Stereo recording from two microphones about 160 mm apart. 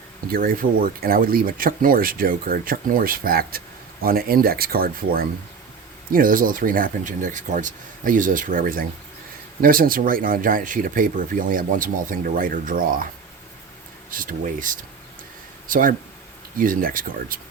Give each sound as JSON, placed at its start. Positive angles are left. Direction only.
{"t": 0.3, "sound": "speech", "side_deg": -65}
{"t": 14.1, "sound": "speech", "side_deg": -60}